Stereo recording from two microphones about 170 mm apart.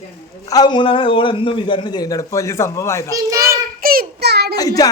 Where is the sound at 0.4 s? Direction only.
25° left (ahead or behind).